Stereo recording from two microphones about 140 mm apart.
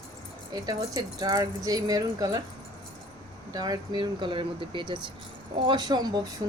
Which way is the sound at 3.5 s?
30° right (ahead or behind).